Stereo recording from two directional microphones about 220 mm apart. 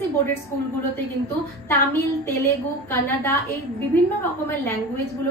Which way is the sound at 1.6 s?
10° left (ahead or behind).